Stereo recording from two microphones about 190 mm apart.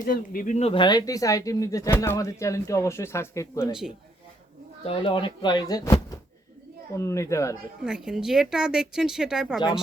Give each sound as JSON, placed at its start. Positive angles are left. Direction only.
{"t": 0.0, "sound": "speech", "side_deg": 45}
{"t": 3.7, "sound": "a woman's voice", "side_deg": -5}
{"t": 4.9, "sound": "speech", "side_deg": 25}
{"t": 7.9, "sound": "a woman's voice", "side_deg": -5}